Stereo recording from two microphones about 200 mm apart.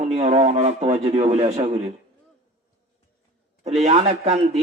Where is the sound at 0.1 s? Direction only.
35° right (ahead or behind).